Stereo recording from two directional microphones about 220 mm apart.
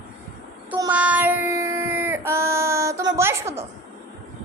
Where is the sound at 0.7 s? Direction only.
15° right (ahead or behind).